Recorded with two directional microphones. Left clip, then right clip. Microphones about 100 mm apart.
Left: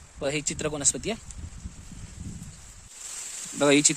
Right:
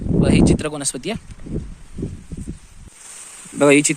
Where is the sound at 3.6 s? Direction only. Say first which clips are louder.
Right 7 dB; 10° right (ahead or behind).